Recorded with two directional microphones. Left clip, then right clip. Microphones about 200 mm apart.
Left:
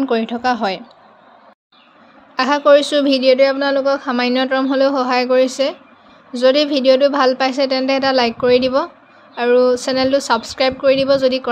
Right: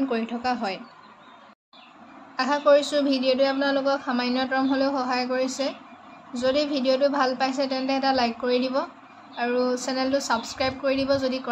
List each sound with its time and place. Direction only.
0.0 s speech: 40° left (ahead or behind)
2.3 s a woman's voice: 50° left (ahead or behind)